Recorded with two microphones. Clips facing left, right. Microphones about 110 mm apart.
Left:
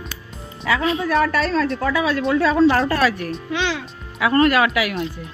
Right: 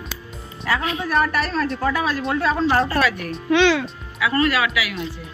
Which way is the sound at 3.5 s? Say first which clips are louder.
Right 8 dB; 90° right.